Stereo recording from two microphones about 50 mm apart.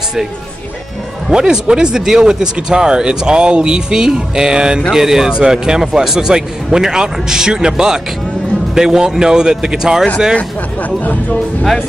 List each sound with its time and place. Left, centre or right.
1.3 s speech: centre
10.3 s speech: left